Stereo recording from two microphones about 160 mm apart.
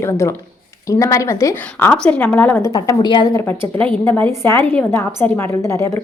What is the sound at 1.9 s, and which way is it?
A woman's voice, 10° left (ahead or behind).